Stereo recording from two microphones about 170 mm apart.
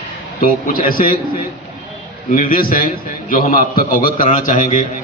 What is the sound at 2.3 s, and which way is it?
A man's voice, 55° left (ahead or behind).